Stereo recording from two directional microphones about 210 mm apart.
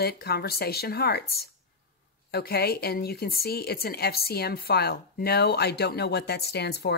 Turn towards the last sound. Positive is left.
turn(degrees=50)  # may be behind; listen again after turning